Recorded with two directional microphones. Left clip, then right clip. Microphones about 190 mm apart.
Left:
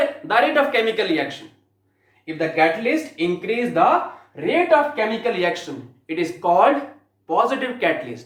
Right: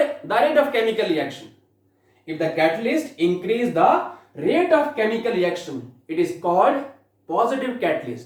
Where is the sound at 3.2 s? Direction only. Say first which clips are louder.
Right 5 dB; 15° left (ahead or behind).